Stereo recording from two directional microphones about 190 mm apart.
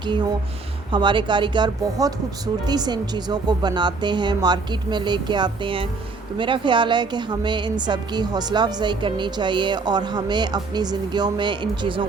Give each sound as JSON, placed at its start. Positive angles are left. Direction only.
{"t": 0.9, "sound": "a woman's voice", "side_deg": -25}